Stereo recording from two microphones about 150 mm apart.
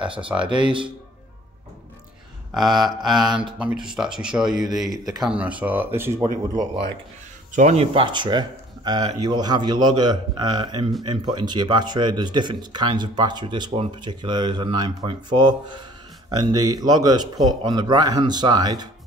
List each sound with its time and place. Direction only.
0.3 s speech: 15° right (ahead or behind)
2.5 s mantra: centre (ahead or behind)
5.0 s speech: centre (ahead or behind)
6.2 s speech: 25° right (ahead or behind)
7.5 s speech: 50° right (ahead or behind); by 18.9 s 25° right (ahead or behind)